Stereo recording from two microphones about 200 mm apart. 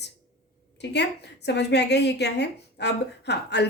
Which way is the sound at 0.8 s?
60° left (ahead or behind).